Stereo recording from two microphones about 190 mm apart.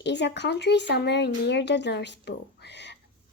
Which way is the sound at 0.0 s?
65° left (ahead or behind).